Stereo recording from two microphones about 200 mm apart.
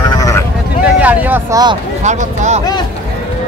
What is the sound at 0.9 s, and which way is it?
Speech, 10° right (ahead or behind).